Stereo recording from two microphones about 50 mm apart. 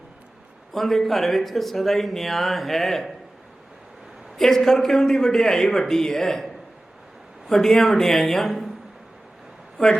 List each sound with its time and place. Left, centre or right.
0.7 s speech: centre
4.4 s a man's voice: centre
9.7 s speech: centre